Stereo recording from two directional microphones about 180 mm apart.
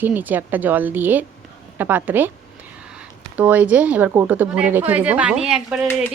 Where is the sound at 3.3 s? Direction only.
10° right (ahead or behind).